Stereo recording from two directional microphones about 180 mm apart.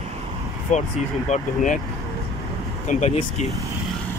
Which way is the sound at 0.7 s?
40° left (ahead or behind).